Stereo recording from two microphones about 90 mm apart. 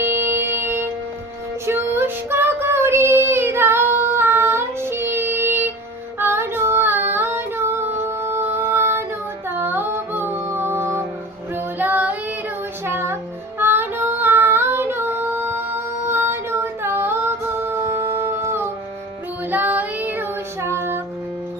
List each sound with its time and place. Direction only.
0.0 s music: 25° right (ahead or behind)
1.6 s child singing: 25° right (ahead or behind)
6.1 s female singing: 25° right (ahead or behind)
12.8 s music: 25° right (ahead or behind)
13.6 s child singing: 25° right (ahead or behind)
16.0 s female singing: 25° right (ahead or behind)
19.5 s child singing: 20° right (ahead or behind)